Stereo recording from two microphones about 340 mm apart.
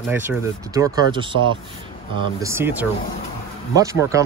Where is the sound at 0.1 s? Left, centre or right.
Centre.